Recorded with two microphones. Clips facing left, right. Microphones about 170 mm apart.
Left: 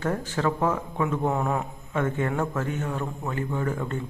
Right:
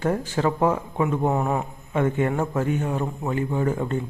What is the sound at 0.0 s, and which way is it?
Speech, 20° right (ahead or behind).